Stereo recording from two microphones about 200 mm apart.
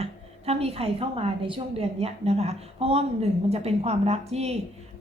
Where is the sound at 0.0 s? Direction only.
30° right (ahead or behind).